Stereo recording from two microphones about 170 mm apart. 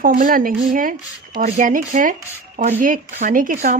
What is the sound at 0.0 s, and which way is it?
Speech, 55° right (ahead or behind).